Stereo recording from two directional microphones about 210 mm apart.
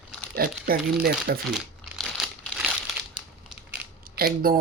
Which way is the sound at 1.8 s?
Centre (ahead or behind).